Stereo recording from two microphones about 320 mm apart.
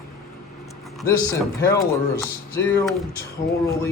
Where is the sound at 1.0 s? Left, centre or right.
Centre.